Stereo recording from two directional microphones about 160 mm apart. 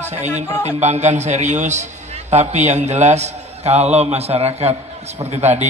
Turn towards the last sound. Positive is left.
turn(degrees=-45)  # may be behind; listen again after turning